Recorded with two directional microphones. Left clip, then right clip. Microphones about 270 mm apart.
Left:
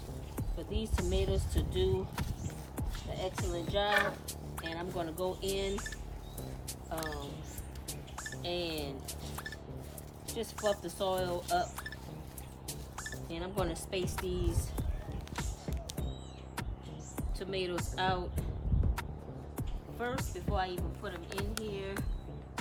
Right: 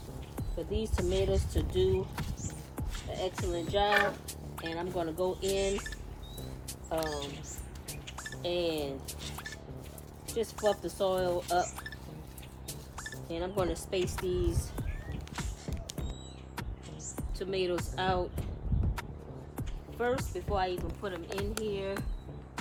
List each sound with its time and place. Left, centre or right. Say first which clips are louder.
0.3 s speech: right 5 dB; centre
7.9 s music: right 1 dB; centre
10.2 s speech: right 4 dB; centre
15.4 s music: even; centre
17.2 s speech: right 4 dB; centre
19.5 s speech: right 5 dB; centre